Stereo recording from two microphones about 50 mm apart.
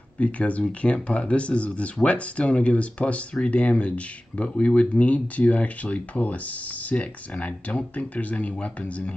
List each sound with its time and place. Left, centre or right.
0.2 s speech: left